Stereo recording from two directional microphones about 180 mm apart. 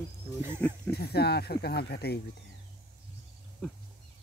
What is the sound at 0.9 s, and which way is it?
Speech, 60° left (ahead or behind).